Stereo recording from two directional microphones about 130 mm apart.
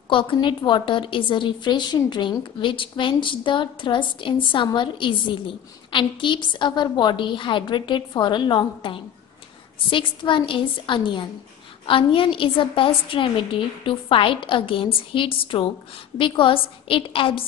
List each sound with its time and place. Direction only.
0.1 s a woman's voice: 40° left (ahead or behind)